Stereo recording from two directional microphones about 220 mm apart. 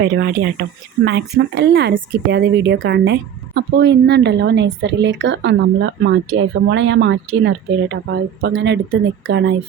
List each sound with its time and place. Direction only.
0.0 s speech: 50° right (ahead or behind)